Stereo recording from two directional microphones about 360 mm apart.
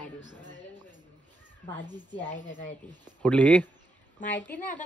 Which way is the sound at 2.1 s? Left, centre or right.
Left.